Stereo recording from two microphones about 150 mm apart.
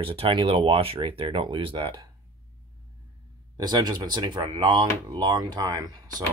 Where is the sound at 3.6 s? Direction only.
25° right (ahead or behind).